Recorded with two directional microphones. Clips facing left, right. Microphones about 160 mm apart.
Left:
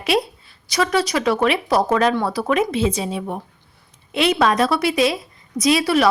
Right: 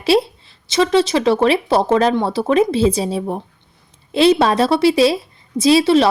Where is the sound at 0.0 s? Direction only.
30° right (ahead or behind).